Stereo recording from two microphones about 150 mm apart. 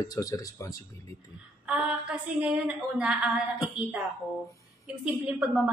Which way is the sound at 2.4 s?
10° right (ahead or behind).